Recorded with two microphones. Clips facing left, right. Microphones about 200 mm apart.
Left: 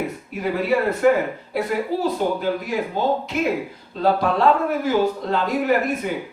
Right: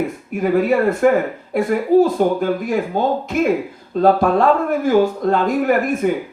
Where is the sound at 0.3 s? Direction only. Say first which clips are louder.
Right 6 dB; 50° right (ahead or behind).